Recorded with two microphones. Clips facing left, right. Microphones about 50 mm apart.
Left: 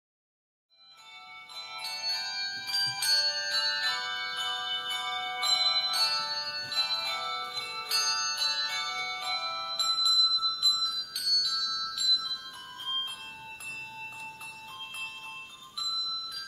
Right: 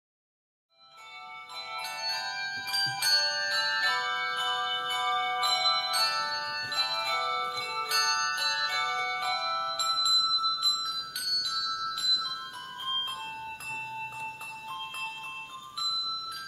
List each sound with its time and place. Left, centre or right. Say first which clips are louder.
1.7 s bell: right 3 dB; centre
3.2 s music: right 3 dB; centre
6.7 s bell: right 3 dB; centre
8.8 s music: right 5 dB; centre
13.9 s music: right 5 dB; centre